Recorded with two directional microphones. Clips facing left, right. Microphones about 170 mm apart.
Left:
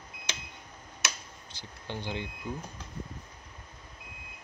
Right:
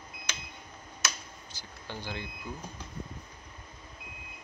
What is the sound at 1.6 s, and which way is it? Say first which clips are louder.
Speech: left 3 dB; 25° left (ahead or behind).